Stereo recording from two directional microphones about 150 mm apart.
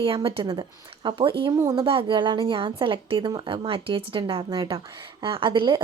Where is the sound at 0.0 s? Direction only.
35° right (ahead or behind).